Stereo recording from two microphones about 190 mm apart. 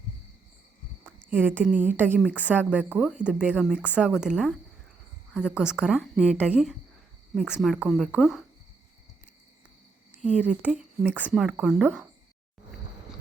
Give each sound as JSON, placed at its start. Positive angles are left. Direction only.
{"t": 1.3, "sound": "a woman's voice", "side_deg": -10}
{"t": 10.1, "sound": "a woman's voice", "side_deg": -5}